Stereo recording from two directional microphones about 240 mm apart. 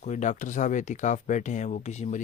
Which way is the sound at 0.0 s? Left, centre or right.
Left.